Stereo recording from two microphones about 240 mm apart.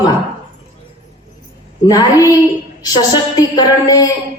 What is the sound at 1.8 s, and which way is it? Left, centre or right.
A woman's voice, centre.